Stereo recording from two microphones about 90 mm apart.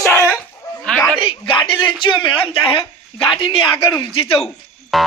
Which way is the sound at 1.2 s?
80° left.